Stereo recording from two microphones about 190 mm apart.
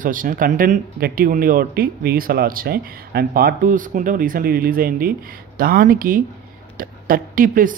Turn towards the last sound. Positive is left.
turn(degrees=-45)  # may be behind; listen again after turning